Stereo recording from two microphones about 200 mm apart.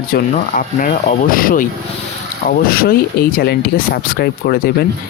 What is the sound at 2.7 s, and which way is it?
Speech, 50° left (ahead or behind).